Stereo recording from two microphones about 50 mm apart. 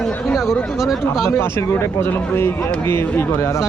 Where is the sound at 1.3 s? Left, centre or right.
Left.